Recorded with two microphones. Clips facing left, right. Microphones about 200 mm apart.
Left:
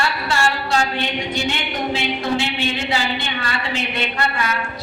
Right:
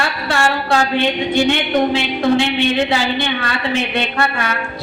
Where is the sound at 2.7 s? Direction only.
60° right (ahead or behind).